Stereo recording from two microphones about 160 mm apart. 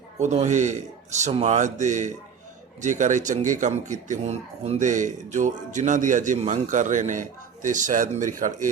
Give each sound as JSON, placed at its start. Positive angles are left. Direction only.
{"t": 0.2, "sound": "speech", "side_deg": -45}